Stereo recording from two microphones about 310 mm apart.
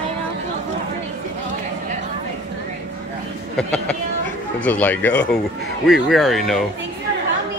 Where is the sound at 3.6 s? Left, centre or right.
Centre.